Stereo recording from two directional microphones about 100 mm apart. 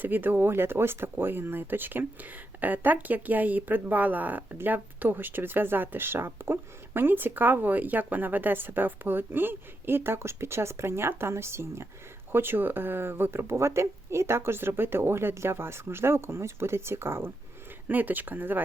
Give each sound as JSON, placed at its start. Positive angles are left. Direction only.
{"t": 0.0, "sound": "speech", "side_deg": -20}